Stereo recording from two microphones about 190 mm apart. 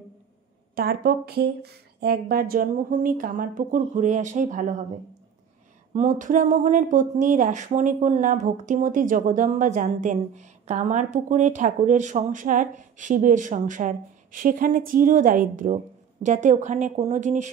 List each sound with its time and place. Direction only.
0.7 s speech: 55° right (ahead or behind)
5.9 s speech: 40° right (ahead or behind)